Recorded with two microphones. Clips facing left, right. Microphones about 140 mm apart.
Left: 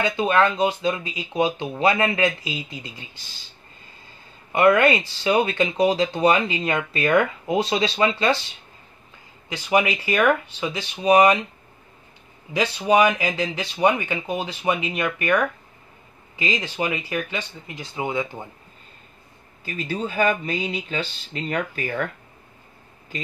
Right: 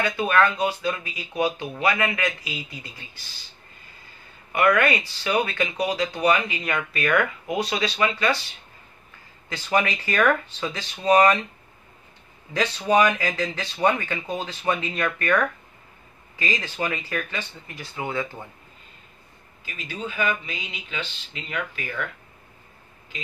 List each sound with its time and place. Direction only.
0.0 s speech: 20° left (ahead or behind)
4.5 s speech: 25° left (ahead or behind)
9.5 s speech: 15° left (ahead or behind)
12.5 s speech: 15° left (ahead or behind)
19.6 s speech: 40° left (ahead or behind)